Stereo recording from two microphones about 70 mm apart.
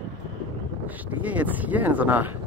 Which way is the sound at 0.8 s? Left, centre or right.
Right.